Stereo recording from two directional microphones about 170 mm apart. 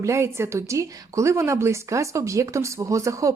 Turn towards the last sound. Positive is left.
turn(degrees=-20)  # may be behind; listen again after turning